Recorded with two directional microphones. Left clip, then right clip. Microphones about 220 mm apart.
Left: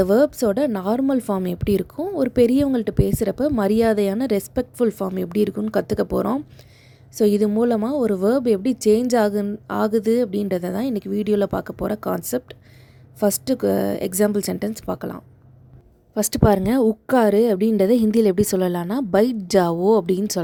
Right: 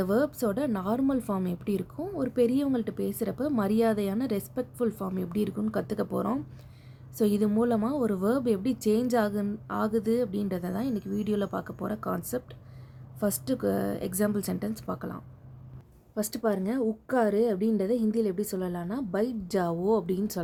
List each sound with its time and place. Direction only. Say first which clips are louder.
0.0 s a woman's voice: left 10 dB; 35° left (ahead or behind)